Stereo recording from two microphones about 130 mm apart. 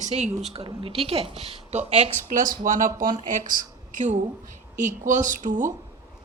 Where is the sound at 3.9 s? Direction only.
70° right (ahead or behind).